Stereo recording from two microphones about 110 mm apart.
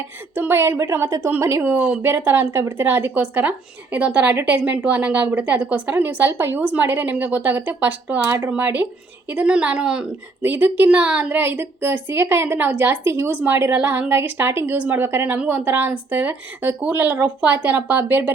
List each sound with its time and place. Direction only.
0.3 s a woman's voice: 20° right (ahead or behind)